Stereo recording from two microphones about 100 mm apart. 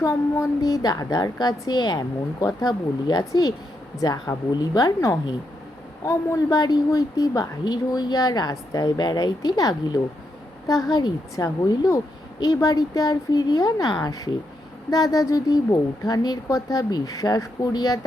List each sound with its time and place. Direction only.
0.0 s speech: 30° left (ahead or behind)